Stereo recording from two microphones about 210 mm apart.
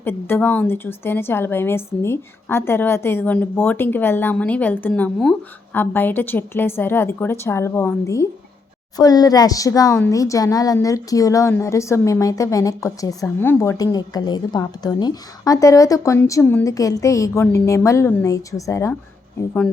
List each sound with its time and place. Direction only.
0.0 s speech: 10° left (ahead or behind)